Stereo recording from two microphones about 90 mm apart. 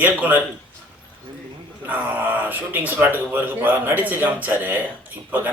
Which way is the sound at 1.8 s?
20° right (ahead or behind).